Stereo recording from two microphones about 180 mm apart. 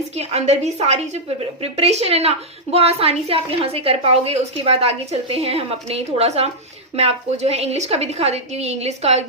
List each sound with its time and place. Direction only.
0.2 s a woman's voice: 35° right (ahead or behind)